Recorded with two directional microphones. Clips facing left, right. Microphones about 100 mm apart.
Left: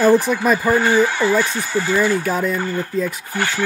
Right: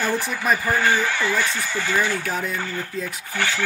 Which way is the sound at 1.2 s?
40° left (ahead or behind).